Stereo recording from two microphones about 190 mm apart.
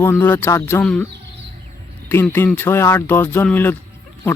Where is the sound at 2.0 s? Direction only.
10° left (ahead or behind).